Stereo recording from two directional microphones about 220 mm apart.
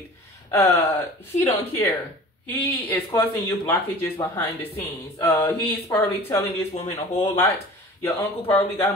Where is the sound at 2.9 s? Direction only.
15° left (ahead or behind).